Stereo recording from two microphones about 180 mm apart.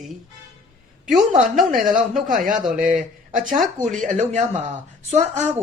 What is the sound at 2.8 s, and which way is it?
Speech, 45° right (ahead or behind).